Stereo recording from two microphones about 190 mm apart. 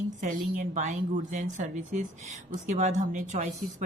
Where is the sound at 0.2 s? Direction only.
45° right (ahead or behind).